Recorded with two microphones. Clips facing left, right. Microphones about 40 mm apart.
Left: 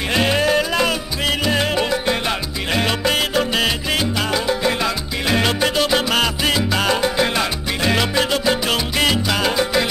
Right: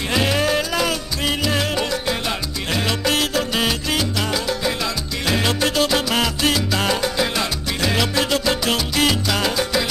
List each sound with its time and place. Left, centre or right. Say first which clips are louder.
0.1 s music: left 2 dB; centre
1.4 s salsa music: left 4 dB; centre